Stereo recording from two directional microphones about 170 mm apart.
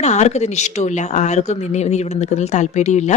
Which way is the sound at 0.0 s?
40° left (ahead or behind).